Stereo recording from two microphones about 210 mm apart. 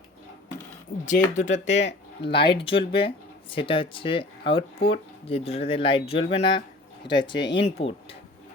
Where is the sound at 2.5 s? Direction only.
25° left (ahead or behind).